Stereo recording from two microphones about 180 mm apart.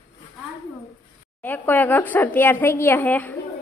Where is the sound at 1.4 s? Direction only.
10° left (ahead or behind).